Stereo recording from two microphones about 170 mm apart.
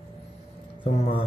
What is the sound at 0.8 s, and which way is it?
Speech, 35° left (ahead or behind).